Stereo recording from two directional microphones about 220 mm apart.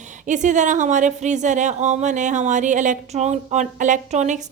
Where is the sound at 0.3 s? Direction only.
35° right (ahead or behind).